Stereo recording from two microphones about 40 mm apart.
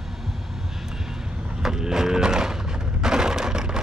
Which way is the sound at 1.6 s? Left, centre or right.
Centre.